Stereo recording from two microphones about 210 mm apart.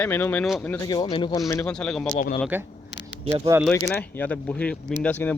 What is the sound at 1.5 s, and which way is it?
Speech, 10° left (ahead or behind).